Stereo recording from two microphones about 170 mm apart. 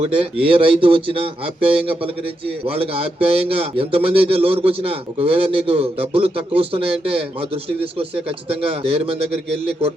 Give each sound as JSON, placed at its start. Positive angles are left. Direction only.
{"t": 0.0, "sound": "speech", "side_deg": -35}